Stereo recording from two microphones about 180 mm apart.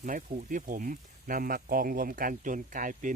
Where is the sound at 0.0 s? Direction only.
50° right (ahead or behind).